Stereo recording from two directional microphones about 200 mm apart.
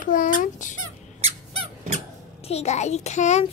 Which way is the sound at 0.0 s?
40° left (ahead or behind).